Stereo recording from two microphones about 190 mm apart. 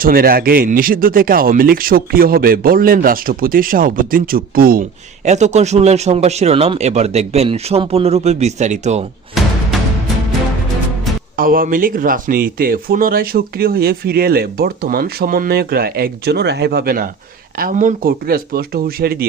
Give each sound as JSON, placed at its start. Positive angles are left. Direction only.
{"t": 0.0, "sound": "speech", "side_deg": -50}
{"t": 11.3, "sound": "speech", "side_deg": -50}